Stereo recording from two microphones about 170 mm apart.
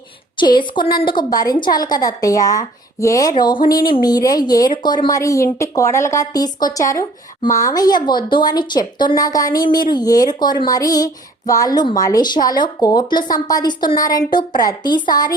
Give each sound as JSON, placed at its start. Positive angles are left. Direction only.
{"t": 0.3, "sound": "a woman's voice", "side_deg": 25}